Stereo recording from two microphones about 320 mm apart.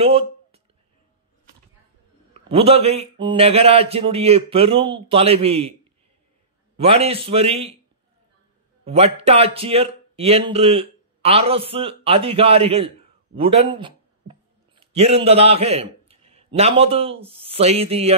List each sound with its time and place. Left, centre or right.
0.0 s a sound: centre
2.4 s speech: centre
6.8 s a man's voice: centre
8.8 s a man's voice: centre